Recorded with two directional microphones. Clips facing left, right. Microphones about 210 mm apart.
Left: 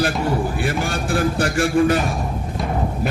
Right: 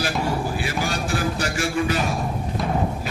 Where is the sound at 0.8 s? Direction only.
55° left (ahead or behind).